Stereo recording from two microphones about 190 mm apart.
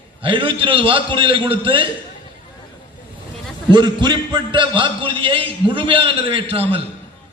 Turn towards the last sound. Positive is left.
turn(degrees=-30)  # may be behind; listen again after turning